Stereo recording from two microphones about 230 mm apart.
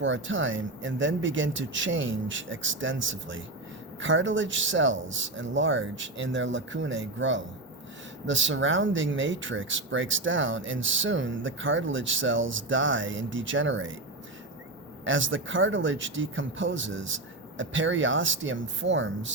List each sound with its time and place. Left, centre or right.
0.0 s speech: right
15.0 s speech: right